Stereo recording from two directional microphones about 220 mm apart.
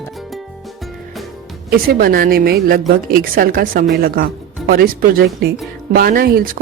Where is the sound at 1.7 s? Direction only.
40° right (ahead or behind).